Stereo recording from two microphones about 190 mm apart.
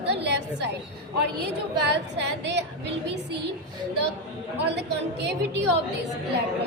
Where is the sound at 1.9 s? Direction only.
65° right (ahead or behind).